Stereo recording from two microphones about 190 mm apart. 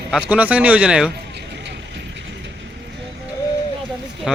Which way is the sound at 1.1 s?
60° right (ahead or behind).